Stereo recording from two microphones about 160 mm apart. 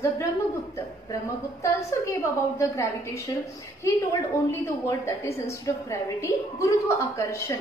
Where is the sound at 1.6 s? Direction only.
20° left (ahead or behind).